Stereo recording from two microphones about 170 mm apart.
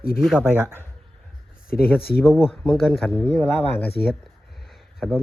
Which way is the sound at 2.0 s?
65° left (ahead or behind).